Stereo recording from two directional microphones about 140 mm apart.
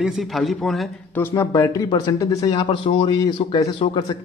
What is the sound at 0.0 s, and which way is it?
Speech, centre (ahead or behind).